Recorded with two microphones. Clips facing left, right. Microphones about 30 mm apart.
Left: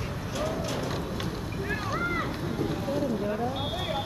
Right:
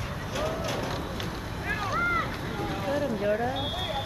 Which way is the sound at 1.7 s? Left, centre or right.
Centre.